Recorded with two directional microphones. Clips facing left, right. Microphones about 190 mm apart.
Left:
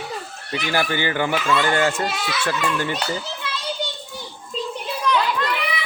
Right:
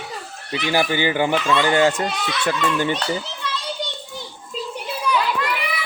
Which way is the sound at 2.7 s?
20° right (ahead or behind).